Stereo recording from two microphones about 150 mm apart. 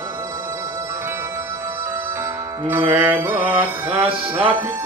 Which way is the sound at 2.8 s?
35° right (ahead or behind).